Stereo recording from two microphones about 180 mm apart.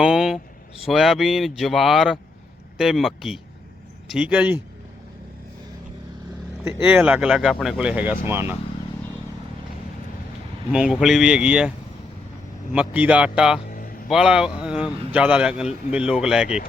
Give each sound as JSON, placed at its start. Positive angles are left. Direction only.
{"t": 0.0, "sound": "a man's voice", "side_deg": -5}
{"t": 6.7, "sound": "speech", "side_deg": -10}
{"t": 10.7, "sound": "a man's voice", "side_deg": -5}
{"t": 12.7, "sound": "speech", "side_deg": -10}
{"t": 13.7, "sound": "a sound", "side_deg": 50}
{"t": 14.1, "sound": "a man's voice", "side_deg": -5}